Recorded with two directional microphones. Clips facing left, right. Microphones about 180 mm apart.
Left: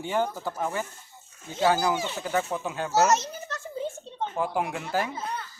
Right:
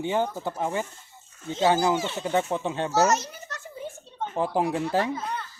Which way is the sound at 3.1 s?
25° left (ahead or behind).